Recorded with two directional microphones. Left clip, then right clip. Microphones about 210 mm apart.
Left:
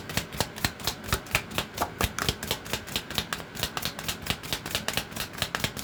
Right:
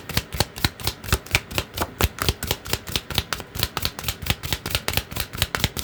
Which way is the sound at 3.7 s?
50° right (ahead or behind).